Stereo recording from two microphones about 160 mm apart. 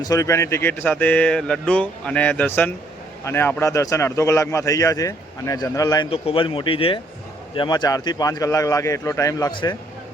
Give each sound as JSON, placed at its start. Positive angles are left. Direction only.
{"t": 0.0, "sound": "a man's voice", "side_deg": 20}
{"t": 6.1, "sound": "a man's voice", "side_deg": 35}
{"t": 9.5, "sound": "speech", "side_deg": 30}